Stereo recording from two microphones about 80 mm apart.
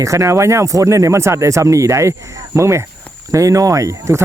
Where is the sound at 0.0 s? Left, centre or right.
Right.